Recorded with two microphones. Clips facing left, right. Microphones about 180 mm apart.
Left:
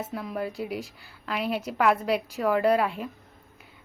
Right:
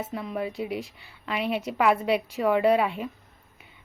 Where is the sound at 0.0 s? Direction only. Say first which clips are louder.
Right 1 dB; centre (ahead or behind).